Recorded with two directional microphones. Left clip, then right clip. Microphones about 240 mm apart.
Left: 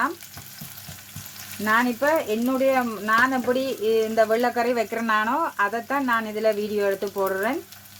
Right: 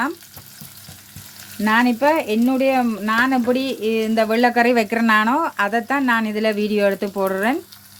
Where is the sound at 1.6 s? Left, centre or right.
Right.